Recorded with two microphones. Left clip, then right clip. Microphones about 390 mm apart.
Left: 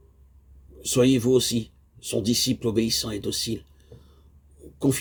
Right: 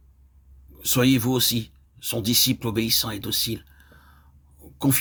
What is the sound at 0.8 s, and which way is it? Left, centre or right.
Speech, right.